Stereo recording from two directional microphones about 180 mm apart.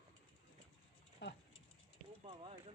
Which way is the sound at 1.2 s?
70° left (ahead or behind).